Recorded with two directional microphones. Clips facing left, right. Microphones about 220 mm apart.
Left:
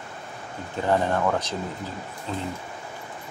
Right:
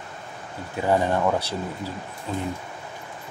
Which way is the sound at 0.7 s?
10° right (ahead or behind).